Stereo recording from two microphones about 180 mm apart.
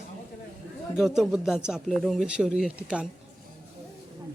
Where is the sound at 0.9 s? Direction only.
Centre (ahead or behind).